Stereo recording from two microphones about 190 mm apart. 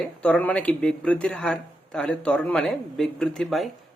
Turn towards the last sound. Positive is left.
turn(degrees=0)  # may be behind; listen again after turning